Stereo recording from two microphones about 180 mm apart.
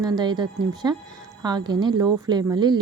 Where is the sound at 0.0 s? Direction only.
25° right (ahead or behind).